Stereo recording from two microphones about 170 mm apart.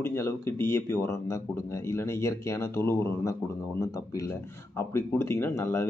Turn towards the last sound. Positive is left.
turn(degrees=15)  # may be behind; listen again after turning